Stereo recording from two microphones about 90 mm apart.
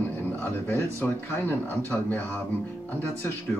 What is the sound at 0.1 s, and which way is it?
Speech, 20° left (ahead or behind).